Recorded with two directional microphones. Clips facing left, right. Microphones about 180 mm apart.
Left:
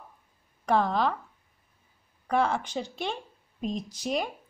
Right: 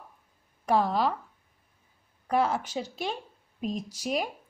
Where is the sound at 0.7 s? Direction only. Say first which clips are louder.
Even; 5° right (ahead or behind).